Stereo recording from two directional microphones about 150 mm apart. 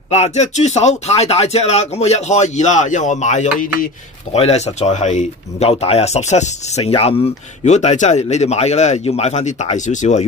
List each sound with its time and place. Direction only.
0.1 s speech: 45° left (ahead or behind)